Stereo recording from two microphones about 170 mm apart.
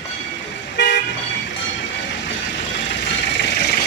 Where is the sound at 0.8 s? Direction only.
90° left.